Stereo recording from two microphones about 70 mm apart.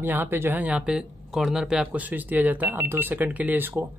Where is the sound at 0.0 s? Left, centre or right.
Right.